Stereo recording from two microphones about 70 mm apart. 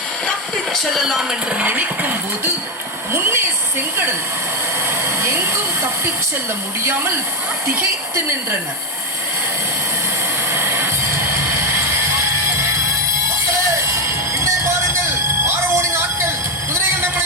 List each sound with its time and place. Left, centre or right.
0.5 s speech: centre
1.6 s speech: right
3.1 s speech: right
5.0 s a woman's voice: right
10.5 s music: right
13.9 s music: right